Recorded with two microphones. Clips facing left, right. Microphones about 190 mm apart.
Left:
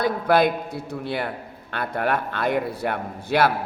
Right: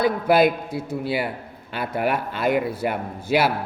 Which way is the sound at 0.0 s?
5° right (ahead or behind).